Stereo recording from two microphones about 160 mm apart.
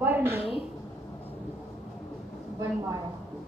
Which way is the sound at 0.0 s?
15° right (ahead or behind).